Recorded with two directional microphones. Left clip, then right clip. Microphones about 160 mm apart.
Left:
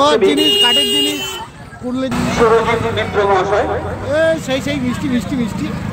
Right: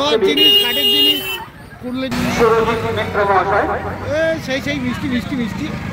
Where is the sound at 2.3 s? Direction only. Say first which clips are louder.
Left 2 dB; 75° right (ahead or behind).